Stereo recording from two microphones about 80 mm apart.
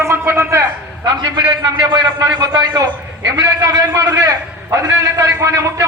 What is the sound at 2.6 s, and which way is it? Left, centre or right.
A man's voice, right.